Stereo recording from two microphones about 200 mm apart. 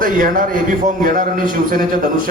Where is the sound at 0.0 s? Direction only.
45° right (ahead or behind).